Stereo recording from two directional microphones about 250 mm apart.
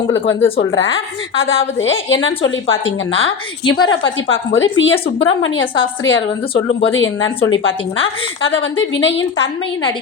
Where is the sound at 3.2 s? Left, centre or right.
Centre.